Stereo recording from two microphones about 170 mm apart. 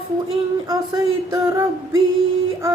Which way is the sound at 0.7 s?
20° right (ahead or behind).